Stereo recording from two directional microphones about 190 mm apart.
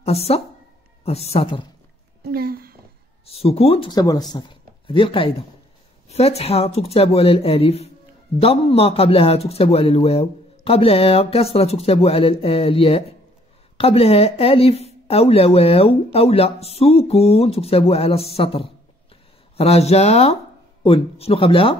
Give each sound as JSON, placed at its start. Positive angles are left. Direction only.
{"t": 0.0, "sound": "speech", "side_deg": 30}
{"t": 2.2, "sound": "a sound", "side_deg": -55}
{"t": 3.3, "sound": "speech", "side_deg": 30}